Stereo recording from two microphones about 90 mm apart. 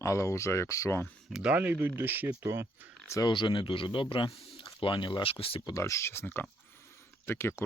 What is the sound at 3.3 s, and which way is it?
Speech, 60° left (ahead or behind).